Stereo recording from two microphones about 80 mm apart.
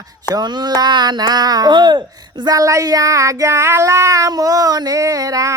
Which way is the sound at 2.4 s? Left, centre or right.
Right.